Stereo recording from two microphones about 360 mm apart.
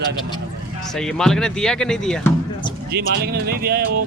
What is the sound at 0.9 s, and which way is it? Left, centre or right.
Speech, centre.